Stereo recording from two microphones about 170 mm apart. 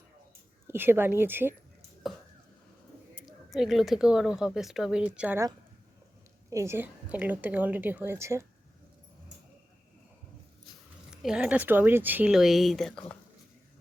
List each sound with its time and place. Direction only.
0.7 s a woman's voice: 10° right (ahead or behind)
3.2 s speech: centre (ahead or behind)
6.5 s a woman's voice: 15° right (ahead or behind)
11.1 s speech: 5° right (ahead or behind)